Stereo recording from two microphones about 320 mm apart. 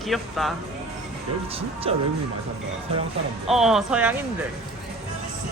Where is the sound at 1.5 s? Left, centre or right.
Centre.